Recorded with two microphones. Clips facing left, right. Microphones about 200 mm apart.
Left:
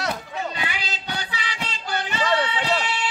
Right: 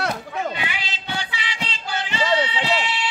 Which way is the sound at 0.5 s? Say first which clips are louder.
Even; 40° left (ahead or behind).